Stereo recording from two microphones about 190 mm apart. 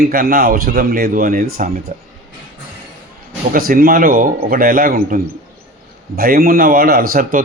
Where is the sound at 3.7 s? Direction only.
50° right (ahead or behind).